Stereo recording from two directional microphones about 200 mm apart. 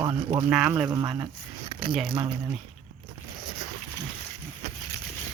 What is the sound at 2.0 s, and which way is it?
Speech, 25° right (ahead or behind).